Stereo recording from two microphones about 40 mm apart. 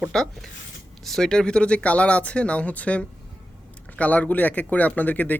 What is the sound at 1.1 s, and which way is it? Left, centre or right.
Speech, centre.